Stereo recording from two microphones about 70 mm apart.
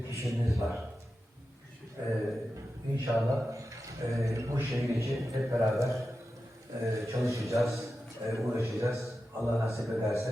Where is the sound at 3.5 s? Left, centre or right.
Right.